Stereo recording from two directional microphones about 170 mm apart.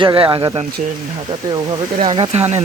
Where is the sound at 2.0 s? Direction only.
35° right (ahead or behind).